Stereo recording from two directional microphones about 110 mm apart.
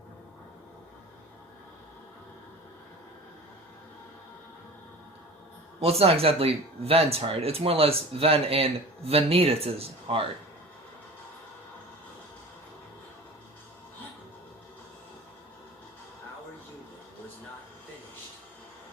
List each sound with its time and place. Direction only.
5.8 s speech: 65° right (ahead or behind)